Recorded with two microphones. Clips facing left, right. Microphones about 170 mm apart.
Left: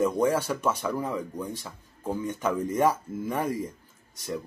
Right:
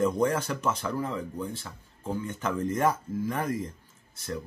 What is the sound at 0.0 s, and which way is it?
Speech, 10° left (ahead or behind).